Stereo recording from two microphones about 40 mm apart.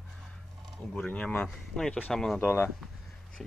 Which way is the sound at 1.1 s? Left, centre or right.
Left.